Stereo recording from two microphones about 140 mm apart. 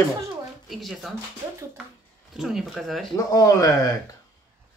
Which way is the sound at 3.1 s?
25° left (ahead or behind).